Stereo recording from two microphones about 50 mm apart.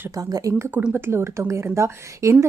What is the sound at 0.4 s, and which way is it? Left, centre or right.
Speech, right.